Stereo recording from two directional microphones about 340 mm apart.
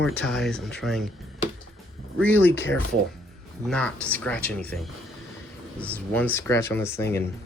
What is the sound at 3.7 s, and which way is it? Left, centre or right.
Speech, centre.